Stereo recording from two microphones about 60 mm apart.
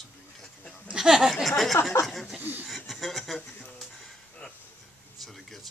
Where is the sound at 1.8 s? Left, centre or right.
Left.